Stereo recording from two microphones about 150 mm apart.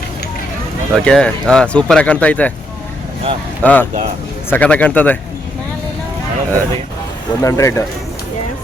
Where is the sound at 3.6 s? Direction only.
10° left (ahead or behind).